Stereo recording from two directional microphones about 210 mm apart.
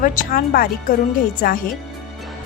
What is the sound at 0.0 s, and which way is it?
A woman's voice, 40° left (ahead or behind).